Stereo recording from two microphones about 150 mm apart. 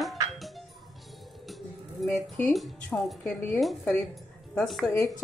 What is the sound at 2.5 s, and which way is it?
Speech, centre (ahead or behind).